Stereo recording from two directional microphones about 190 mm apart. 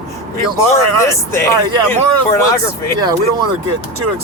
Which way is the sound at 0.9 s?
15° left (ahead or behind).